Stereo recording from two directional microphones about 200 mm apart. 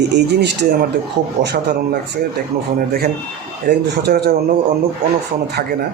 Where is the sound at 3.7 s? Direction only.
55° right (ahead or behind).